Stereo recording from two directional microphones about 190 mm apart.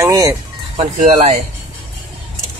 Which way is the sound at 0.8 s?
35° right (ahead or behind).